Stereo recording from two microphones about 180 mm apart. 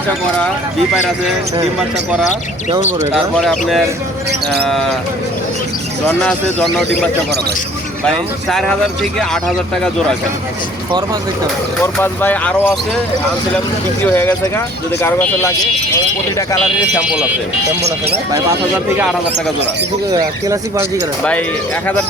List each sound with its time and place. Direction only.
3.2 s speech: centre (ahead or behind)
4.6 s speech: centre (ahead or behind)
6.1 s speech: 5° left (ahead or behind)
11.8 s speech: 10° left (ahead or behind)
14.0 s speech: 10° left (ahead or behind)
20.1 s speech: 20° right (ahead or behind)